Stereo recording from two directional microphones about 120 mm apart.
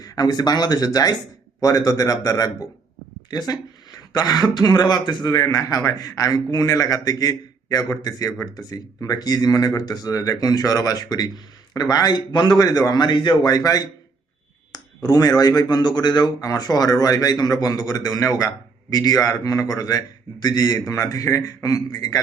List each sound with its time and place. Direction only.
0.0 s a man's voice: 35° left (ahead or behind)